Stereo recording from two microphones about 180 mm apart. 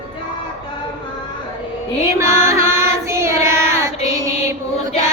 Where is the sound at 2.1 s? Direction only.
15° right (ahead or behind).